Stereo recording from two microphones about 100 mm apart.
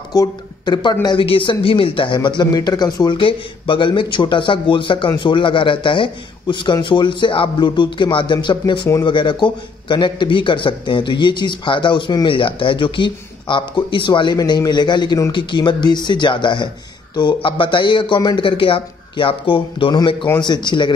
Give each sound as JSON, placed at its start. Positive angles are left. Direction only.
{"t": 0.1, "sound": "speech", "side_deg": 45}
{"t": 1.0, "sound": "a man's voice", "side_deg": 60}